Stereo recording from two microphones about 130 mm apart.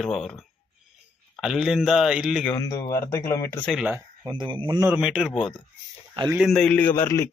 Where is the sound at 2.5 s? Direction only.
25° left (ahead or behind).